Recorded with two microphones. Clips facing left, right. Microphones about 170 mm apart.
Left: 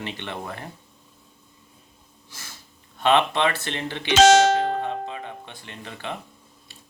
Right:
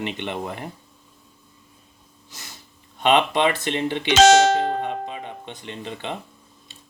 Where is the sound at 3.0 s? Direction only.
15° right (ahead or behind).